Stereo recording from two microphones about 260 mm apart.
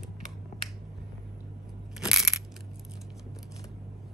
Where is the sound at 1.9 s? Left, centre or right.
Centre.